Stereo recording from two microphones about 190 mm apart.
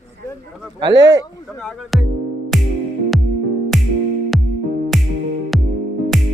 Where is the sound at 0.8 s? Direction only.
20° right (ahead or behind).